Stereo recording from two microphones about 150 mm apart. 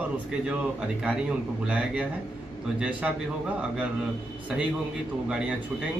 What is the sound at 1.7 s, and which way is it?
Speech, 10° right (ahead or behind).